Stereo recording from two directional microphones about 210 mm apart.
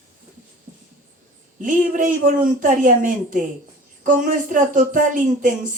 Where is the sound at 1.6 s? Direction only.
40° right (ahead or behind).